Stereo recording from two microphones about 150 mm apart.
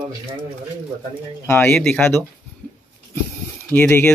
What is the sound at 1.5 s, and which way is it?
Speech, 15° left (ahead or behind).